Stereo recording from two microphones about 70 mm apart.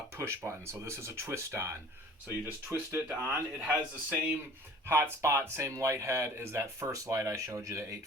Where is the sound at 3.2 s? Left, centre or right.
Right.